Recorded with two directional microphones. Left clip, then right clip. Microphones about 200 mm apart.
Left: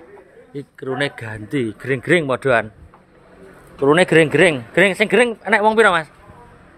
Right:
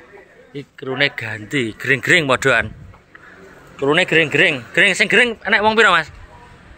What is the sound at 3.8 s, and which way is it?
A man's voice, 25° left (ahead or behind).